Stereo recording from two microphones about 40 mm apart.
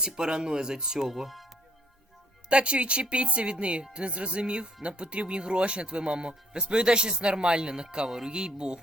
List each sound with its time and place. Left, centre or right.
0.0 s speech: centre
2.5 s speech: right